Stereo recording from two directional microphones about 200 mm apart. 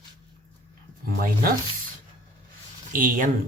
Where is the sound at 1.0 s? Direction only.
45° right (ahead or behind).